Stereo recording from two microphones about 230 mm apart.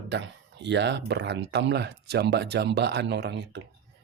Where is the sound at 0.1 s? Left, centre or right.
Right.